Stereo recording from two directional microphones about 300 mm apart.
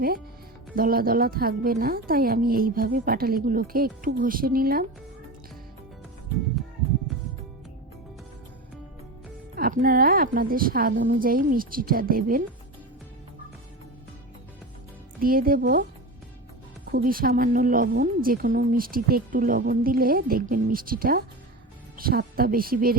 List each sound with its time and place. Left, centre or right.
0.8 s a woman's voice: right
9.6 s a woman's voice: right
15.2 s a woman's voice: right
16.9 s a woman's voice: right